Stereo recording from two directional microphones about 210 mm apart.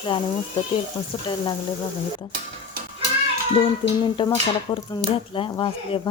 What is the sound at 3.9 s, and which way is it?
Speech, 20° left (ahead or behind).